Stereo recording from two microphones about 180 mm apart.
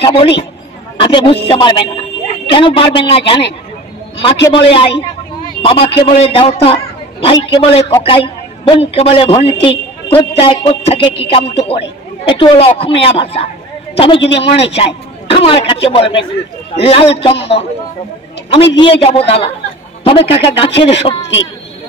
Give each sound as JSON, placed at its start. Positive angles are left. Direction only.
{"t": 0.0, "sound": "a man's voice", "side_deg": 30}
{"t": 18.8, "sound": "a man's voice", "side_deg": 30}